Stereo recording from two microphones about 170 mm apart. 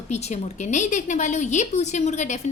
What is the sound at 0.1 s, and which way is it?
A woman's voice, 40° left (ahead or behind).